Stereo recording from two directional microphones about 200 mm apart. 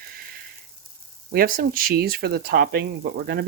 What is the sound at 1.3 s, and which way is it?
Speech, 45° right (ahead or behind).